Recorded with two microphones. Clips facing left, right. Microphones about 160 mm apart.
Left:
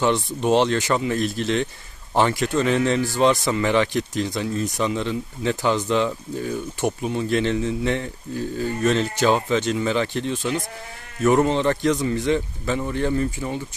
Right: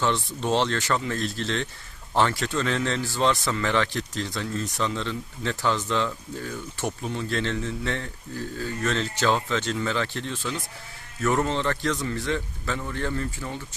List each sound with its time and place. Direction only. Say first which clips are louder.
0.0 s a man's voice: left 5 dB; 15° left (ahead or behind)